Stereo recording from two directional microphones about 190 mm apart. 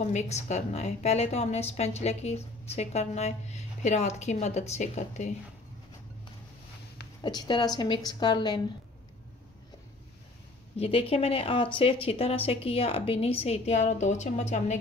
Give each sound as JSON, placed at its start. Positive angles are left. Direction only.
{"t": 0.0, "sound": "a woman's voice", "side_deg": 35}
{"t": 7.2, "sound": "speech", "side_deg": 20}
{"t": 10.8, "sound": "a woman's voice", "side_deg": 30}